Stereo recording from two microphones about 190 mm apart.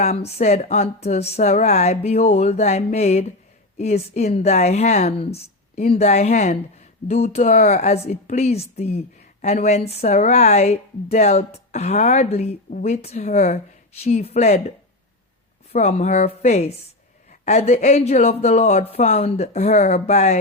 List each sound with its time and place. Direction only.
0.0 s speech: 35° left (ahead or behind)
15.7 s speech: 35° left (ahead or behind)